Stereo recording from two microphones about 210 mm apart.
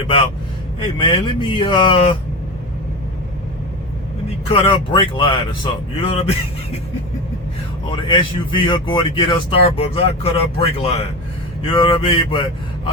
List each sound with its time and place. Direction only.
0.9 s a man's voice: 20° left (ahead or behind)
4.4 s a man's voice: 25° left (ahead or behind)
7.9 s a man's voice: 25° left (ahead or behind)